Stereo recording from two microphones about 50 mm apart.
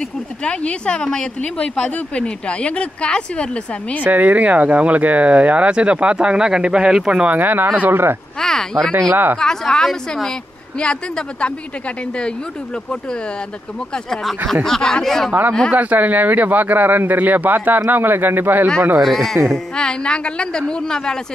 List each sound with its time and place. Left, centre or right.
0.4 s speech: centre
4.0 s speech: right; by 7.1 s centre
7.1 s speech: right
8.4 s a woman's voice: centre
9.1 s speech: right
9.4 s a woman's voice: centre
14.5 s a woman's voice: centre
15.7 s speech: right
19.0 s speech: centre
19.7 s a woman's voice: centre